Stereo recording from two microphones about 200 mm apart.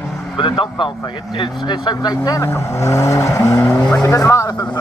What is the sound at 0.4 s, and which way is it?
Speech, 25° left (ahead or behind).